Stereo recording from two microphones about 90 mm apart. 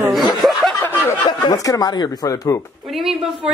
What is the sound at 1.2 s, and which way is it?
Speech, 45° left (ahead or behind).